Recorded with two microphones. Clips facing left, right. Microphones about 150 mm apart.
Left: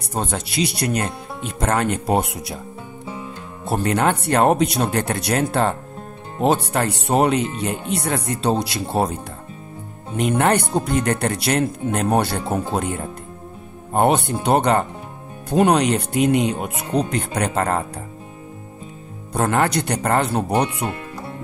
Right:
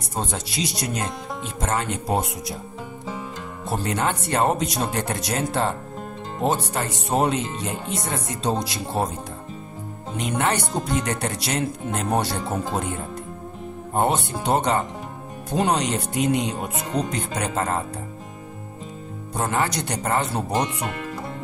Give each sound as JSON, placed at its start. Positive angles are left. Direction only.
{"t": 0.2, "sound": "speech", "side_deg": 60}
{"t": 3.6, "sound": "speech", "side_deg": 60}
{"t": 10.1, "sound": "speech", "side_deg": 55}
{"t": 13.9, "sound": "speech", "side_deg": 60}
{"t": 19.3, "sound": "speech", "side_deg": 65}